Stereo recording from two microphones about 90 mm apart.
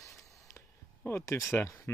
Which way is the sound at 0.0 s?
35° left (ahead or behind).